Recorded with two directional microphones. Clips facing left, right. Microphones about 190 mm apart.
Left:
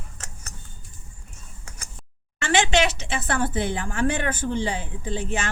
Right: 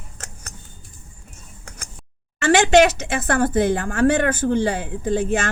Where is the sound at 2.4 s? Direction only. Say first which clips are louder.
Right 7 dB; 40° right (ahead or behind).